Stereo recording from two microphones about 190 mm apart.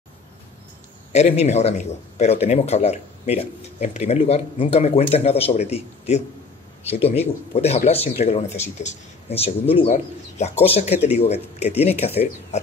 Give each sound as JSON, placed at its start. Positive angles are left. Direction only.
{"t": 1.1, "sound": "a man's voice", "side_deg": 35}